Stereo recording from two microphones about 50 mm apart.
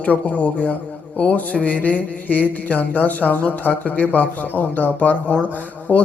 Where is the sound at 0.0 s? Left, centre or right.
Left.